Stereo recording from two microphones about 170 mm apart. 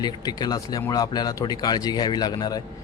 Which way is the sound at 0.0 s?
25° left (ahead or behind).